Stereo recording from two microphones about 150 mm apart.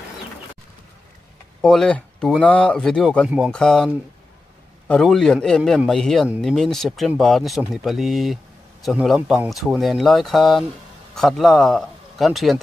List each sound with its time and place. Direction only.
1.6 s speech: 5° left (ahead or behind)